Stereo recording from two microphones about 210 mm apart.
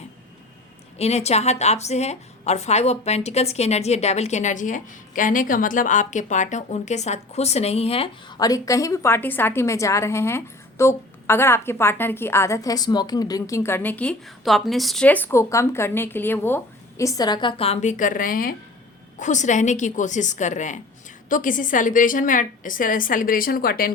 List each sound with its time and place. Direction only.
0.9 s a woman's voice: 30° left (ahead or behind)